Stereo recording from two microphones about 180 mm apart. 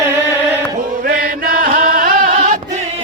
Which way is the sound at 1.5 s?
50° right (ahead or behind).